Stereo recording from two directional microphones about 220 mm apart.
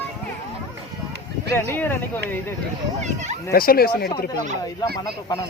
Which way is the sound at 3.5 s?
40° left (ahead or behind).